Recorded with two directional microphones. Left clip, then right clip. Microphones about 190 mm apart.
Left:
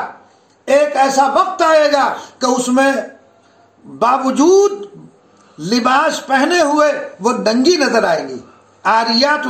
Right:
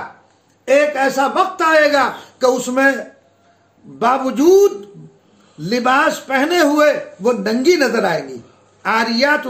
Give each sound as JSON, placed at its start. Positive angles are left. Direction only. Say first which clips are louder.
{"t": 0.7, "sound": "a man's voice", "louder": "left 2 dB", "side_deg": -30}
{"t": 4.0, "sound": "a man's voice", "louder": "left 2 dB", "side_deg": -25}